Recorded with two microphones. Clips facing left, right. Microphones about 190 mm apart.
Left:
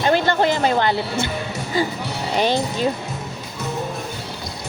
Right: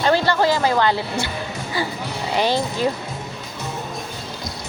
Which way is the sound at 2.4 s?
20° left (ahead or behind).